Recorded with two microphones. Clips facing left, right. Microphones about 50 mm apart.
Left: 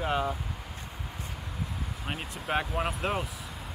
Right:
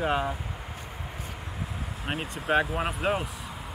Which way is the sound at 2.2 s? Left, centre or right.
Centre.